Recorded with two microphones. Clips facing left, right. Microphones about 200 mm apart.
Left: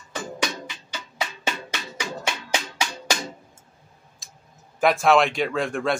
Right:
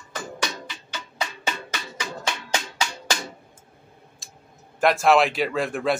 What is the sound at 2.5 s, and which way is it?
Music, 10° left (ahead or behind).